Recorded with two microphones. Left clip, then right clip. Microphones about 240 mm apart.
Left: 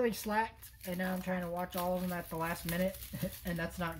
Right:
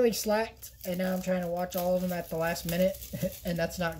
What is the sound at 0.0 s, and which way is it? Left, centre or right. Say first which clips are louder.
Speech: right 6 dB; centre.